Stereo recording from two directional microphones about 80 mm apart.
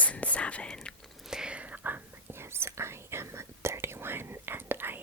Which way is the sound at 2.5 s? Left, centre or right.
Right.